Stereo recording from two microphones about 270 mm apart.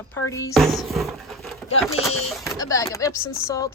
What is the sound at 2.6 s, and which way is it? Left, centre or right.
Speech, centre.